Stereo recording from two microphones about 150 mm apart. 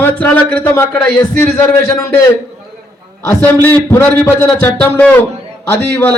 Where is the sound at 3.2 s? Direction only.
15° left (ahead or behind).